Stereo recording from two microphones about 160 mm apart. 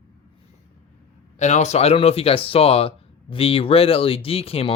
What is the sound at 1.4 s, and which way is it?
Speech, 45° left (ahead or behind).